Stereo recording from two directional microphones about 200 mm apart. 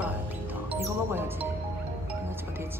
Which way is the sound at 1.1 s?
10° right (ahead or behind).